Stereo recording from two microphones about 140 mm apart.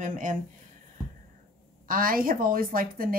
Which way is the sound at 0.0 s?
65° right (ahead or behind).